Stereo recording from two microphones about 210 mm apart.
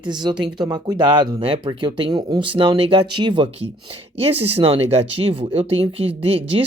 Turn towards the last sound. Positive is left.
turn(degrees=-25)  # may be behind; listen again after turning